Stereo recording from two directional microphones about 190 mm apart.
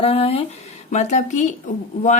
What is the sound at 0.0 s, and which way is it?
Speech, 30° left (ahead or behind).